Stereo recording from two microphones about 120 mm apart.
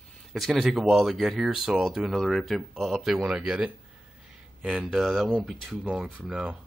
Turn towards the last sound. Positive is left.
turn(degrees=-10)  # may be behind; listen again after turning